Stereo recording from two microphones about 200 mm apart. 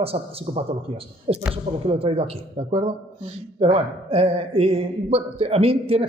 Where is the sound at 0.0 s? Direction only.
30° right (ahead or behind).